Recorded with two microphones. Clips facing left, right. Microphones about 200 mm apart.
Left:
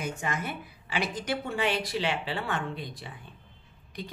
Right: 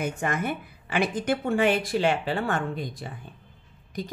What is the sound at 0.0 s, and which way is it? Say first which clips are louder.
A woman's voice: right 5 dB; 55° right (ahead or behind).